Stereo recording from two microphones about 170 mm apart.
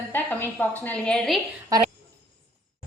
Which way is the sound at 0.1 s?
10° left (ahead or behind).